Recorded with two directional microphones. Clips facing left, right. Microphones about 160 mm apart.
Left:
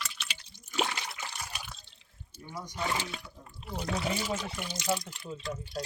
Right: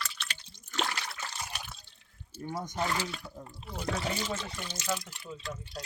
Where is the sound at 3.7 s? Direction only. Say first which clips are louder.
Left 1 dB; 10° left (ahead or behind).